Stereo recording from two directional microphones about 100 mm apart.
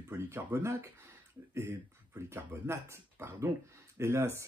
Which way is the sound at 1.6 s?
30° right (ahead or behind).